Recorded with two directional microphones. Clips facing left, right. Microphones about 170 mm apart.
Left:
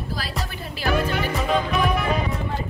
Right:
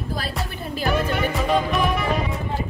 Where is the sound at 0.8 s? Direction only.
Centre (ahead or behind).